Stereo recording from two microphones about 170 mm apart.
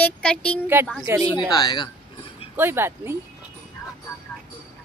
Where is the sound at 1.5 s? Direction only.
25° left (ahead or behind).